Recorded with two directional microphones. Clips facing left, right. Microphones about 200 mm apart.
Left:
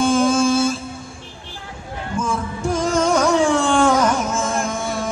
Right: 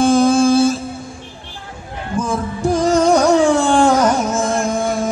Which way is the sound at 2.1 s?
35° right (ahead or behind).